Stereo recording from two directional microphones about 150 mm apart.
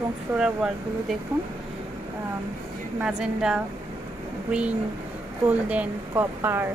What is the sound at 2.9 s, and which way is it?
Speech, 5° right (ahead or behind).